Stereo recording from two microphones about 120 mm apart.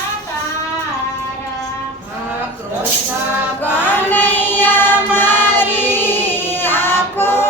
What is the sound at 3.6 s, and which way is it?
Chant, 15° left (ahead or behind).